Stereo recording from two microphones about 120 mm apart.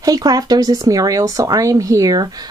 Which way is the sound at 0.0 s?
30° right (ahead or behind).